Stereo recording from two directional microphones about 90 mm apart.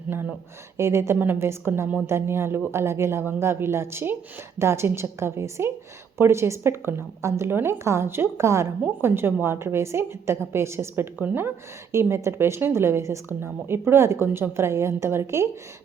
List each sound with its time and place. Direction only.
0.8 s a woman's voice: 30° right (ahead or behind)